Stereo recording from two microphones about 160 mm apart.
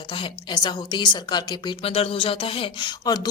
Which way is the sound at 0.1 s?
30° left (ahead or behind).